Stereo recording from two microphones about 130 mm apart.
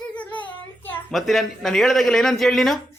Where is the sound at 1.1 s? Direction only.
Centre (ahead or behind).